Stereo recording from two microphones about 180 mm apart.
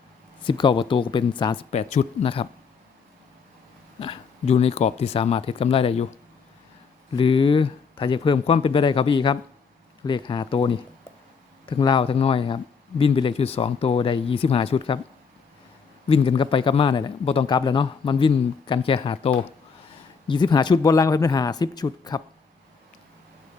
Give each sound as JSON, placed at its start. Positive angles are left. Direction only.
{"t": 0.4, "sound": "a man's voice", "side_deg": 25}
{"t": 1.7, "sound": "speech", "side_deg": 40}
{"t": 4.0, "sound": "speech", "side_deg": 35}
{"t": 7.2, "sound": "a man's voice", "side_deg": 30}
{"t": 16.0, "sound": "a man's voice", "side_deg": 30}